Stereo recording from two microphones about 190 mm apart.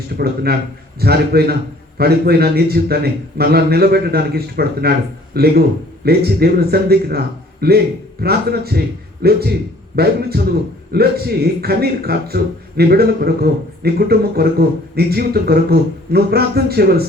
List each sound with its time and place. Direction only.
0.2 s a man's voice: 55° right (ahead or behind)